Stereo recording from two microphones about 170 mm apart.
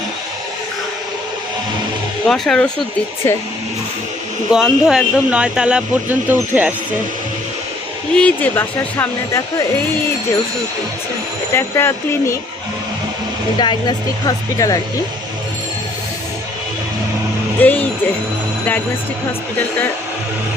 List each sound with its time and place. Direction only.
2.2 s speech: centre (ahead or behind)
4.5 s speech: 5° right (ahead or behind)
8.1 s speech: 10° left (ahead or behind)
11.5 s speech: 15° left (ahead or behind)
13.6 s speech: 25° left (ahead or behind)
17.6 s speech: 10° left (ahead or behind)